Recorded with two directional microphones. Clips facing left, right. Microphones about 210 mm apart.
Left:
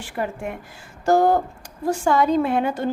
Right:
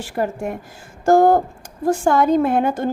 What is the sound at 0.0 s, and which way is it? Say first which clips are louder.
A woman's voice: right 4 dB; 40° right (ahead or behind).